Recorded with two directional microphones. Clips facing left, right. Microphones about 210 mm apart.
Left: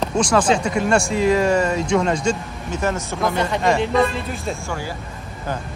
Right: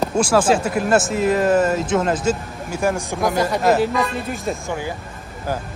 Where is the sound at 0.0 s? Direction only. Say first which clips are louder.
Right 1 dB; 5° right (ahead or behind).